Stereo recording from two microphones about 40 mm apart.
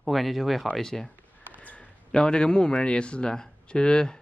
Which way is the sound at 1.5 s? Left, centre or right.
Left.